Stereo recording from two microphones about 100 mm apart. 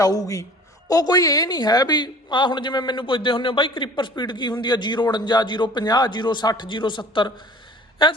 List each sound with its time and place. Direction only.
0.0 s a woman's voice: 35° left (ahead or behind); by 8.2 s 55° left (ahead or behind)